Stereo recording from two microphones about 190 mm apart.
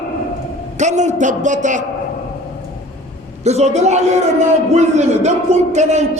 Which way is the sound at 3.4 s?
35° right (ahead or behind).